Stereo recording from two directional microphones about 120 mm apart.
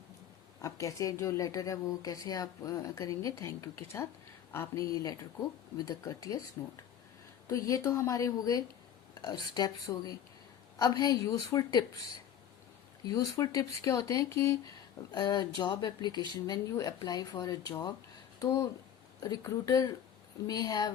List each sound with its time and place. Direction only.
0.6 s speech: 25° left (ahead or behind)
7.4 s speech: 25° left (ahead or behind)
13.1 s speech: 30° left (ahead or behind)
15.1 s speech: 35° left (ahead or behind)